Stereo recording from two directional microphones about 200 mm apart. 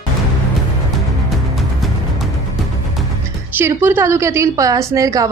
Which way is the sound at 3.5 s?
10° right (ahead or behind).